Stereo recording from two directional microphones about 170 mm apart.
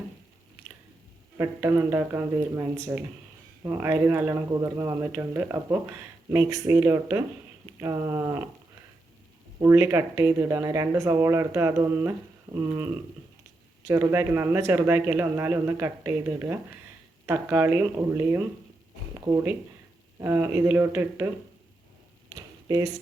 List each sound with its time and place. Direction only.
1.4 s speech: 15° right (ahead or behind)
9.6 s speech: 15° right (ahead or behind)
22.7 s speech: 20° right (ahead or behind)